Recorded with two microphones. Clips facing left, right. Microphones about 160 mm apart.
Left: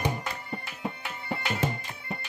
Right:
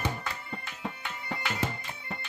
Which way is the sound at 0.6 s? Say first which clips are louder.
Left 2 dB; 10° left (ahead or behind).